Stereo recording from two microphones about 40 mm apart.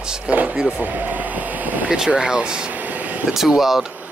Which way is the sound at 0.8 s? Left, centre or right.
Right.